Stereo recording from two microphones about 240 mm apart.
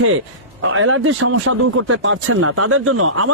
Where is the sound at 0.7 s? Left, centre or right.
Right.